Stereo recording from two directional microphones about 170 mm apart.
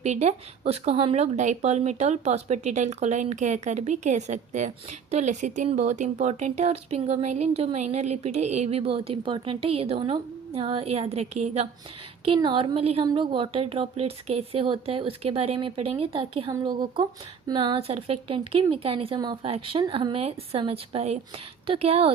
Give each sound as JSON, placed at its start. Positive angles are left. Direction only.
{"t": 0.0, "sound": "speech", "side_deg": -40}